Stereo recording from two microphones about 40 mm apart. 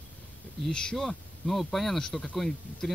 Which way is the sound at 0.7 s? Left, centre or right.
Left.